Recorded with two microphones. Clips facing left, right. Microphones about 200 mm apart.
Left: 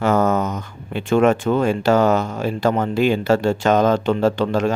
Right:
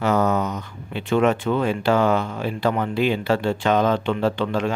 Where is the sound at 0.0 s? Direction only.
50° left (ahead or behind).